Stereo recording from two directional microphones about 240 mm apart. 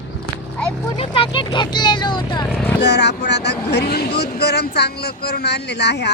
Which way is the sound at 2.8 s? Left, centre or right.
Left.